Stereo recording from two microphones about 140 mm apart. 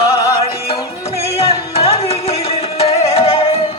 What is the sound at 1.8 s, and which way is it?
Music, 45° left (ahead or behind).